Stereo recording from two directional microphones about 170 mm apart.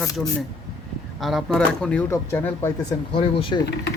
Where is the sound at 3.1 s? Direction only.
35° left (ahead or behind).